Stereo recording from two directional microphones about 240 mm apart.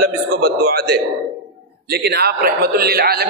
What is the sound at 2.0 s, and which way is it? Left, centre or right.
A man's voice, right.